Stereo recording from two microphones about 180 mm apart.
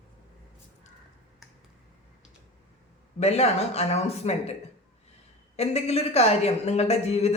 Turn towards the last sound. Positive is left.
turn(degrees=35)  # may be behind; listen again after turning